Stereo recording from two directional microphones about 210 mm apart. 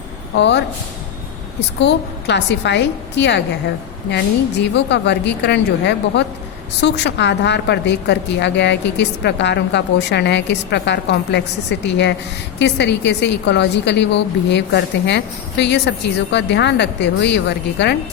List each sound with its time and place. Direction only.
0.3 s a woman's voice: 55° left (ahead or behind)
1.8 s a woman's voice: 55° left (ahead or behind)
4.6 s a woman's voice: 55° left (ahead or behind)